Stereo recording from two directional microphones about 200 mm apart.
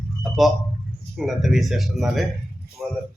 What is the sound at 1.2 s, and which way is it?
A woman's voice, centre (ahead or behind).